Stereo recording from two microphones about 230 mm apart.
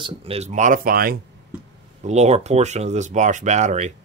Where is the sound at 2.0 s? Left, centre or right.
Right.